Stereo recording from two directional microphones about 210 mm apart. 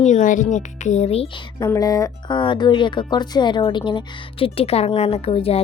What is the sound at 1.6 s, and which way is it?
A woman's voice, 15° left (ahead or behind).